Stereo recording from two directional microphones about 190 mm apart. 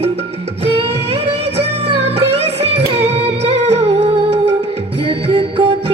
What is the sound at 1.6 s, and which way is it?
Music, 30° right (ahead or behind).